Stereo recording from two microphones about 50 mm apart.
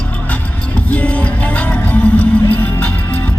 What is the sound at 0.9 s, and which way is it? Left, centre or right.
Music, left.